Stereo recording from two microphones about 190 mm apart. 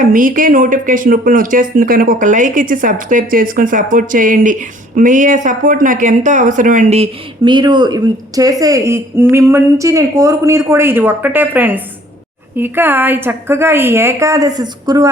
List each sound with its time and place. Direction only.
0.0 s a woman's voice: 45° right (ahead or behind); by 15.1 s 20° right (ahead or behind)